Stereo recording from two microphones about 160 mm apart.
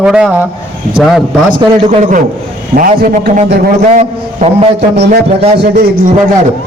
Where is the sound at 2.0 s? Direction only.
55° right (ahead or behind).